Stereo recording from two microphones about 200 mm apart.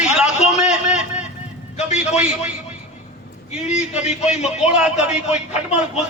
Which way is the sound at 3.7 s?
35° left (ahead or behind).